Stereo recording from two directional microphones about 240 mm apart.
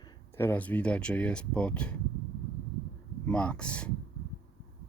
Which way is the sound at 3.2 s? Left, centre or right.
Centre.